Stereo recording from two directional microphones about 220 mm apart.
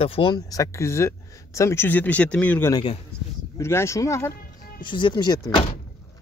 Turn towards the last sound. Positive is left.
turn(degrees=20)  # may be behind; listen again after turning